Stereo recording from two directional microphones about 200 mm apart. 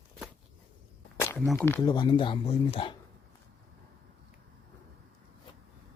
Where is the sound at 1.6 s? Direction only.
15° left (ahead or behind).